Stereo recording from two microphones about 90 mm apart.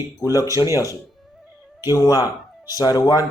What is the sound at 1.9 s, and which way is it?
Speech, 45° left (ahead or behind).